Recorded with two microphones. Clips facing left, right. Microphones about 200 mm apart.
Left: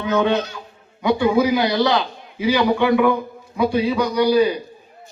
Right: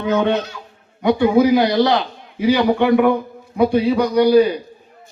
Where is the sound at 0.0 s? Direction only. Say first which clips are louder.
Right 1 dB; 55° right (ahead or behind).